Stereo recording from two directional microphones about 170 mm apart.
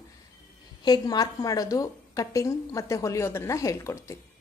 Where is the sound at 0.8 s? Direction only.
25° left (ahead or behind).